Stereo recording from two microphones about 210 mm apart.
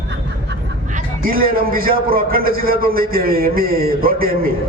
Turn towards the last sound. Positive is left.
turn(degrees=-45)  # may be behind; listen again after turning